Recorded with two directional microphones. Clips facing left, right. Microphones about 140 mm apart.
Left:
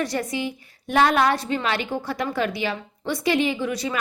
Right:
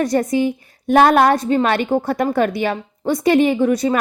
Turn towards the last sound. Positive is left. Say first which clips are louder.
# right 9 dB
turn(degrees=-50)  # may be behind; listen again after turning